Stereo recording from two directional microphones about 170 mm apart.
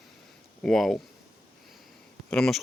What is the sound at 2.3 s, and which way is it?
Speech, 5° left (ahead or behind).